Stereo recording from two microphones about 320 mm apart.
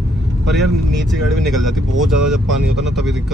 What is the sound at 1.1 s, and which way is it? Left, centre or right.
Speech, centre.